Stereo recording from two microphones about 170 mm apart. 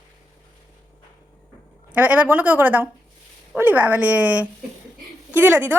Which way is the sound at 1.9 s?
10° right (ahead or behind).